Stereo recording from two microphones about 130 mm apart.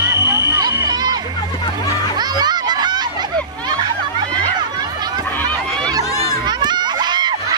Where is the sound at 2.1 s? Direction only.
30° right (ahead or behind).